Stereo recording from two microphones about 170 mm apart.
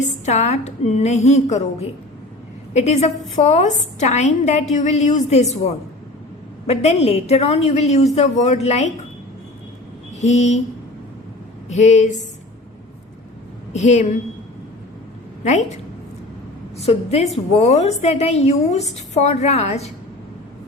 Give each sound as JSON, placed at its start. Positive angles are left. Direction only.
{"t": 0.3, "sound": "a woman's voice", "side_deg": 40}
{"t": 10.2, "sound": "a woman's voice", "side_deg": 40}
{"t": 11.7, "sound": "a woman's voice", "side_deg": 45}
{"t": 13.7, "sound": "a woman's voice", "side_deg": 40}
{"t": 16.8, "sound": "a woman's voice", "side_deg": 35}